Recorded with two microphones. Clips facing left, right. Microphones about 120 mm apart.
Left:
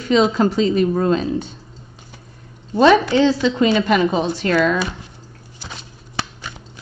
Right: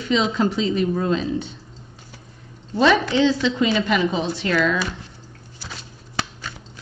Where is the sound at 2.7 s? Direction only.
45° left (ahead or behind).